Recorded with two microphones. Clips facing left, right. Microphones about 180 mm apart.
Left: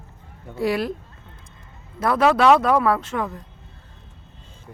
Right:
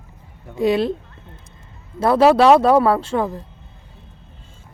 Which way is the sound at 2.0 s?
30° right (ahead or behind).